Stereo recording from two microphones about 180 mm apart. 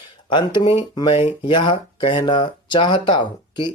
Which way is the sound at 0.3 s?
25° left (ahead or behind).